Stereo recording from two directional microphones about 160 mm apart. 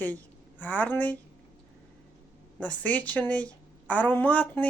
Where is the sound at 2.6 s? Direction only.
10° left (ahead or behind).